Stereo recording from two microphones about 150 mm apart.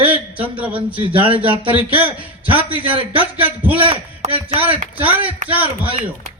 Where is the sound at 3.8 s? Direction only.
40° right (ahead or behind).